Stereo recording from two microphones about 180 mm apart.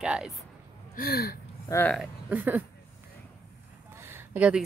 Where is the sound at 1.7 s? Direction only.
15° left (ahead or behind).